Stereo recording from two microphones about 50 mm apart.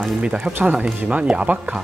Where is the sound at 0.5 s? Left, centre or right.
Right.